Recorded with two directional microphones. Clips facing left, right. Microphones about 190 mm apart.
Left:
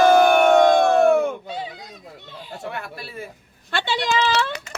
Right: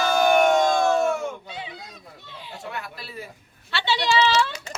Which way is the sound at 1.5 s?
40° left (ahead or behind).